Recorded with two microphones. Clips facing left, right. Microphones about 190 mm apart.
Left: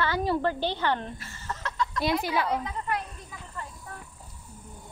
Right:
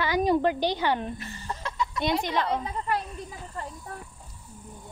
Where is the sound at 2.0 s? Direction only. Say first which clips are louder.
Even; 5° left (ahead or behind).